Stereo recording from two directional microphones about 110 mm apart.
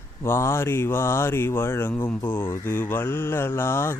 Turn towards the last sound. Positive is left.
turn(degrees=20)  # may be behind; listen again after turning